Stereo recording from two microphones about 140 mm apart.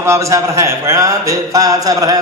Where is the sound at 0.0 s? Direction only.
20° right (ahead or behind).